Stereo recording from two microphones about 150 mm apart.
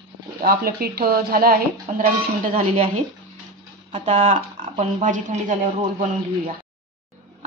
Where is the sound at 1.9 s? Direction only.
50° right (ahead or behind).